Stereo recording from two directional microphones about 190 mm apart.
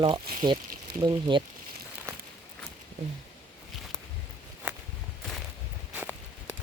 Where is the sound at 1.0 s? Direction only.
20° right (ahead or behind).